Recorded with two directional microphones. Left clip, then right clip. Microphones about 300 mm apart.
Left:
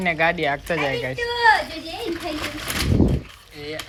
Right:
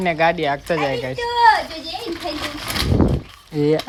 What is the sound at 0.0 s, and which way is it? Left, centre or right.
Speech, centre.